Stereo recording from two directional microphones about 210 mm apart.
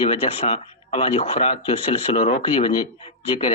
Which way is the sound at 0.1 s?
25° left (ahead or behind).